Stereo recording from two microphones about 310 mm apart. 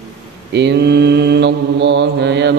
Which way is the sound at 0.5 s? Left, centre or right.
Right.